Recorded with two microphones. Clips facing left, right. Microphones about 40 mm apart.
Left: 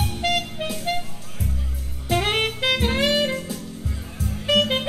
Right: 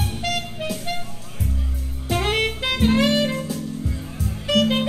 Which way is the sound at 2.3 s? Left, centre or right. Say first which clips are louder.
Left 1 dB; left.